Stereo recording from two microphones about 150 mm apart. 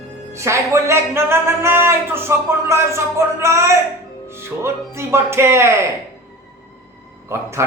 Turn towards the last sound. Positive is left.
turn(degrees=-20)  # may be behind; listen again after turning